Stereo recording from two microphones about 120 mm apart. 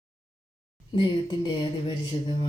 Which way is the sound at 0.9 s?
40° left (ahead or behind).